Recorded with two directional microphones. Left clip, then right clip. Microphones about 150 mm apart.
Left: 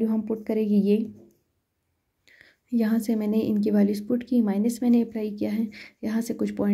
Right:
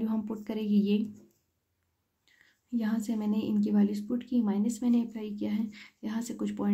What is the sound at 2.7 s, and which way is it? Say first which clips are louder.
A woman's voice: left 7 dB; 30° left (ahead or behind).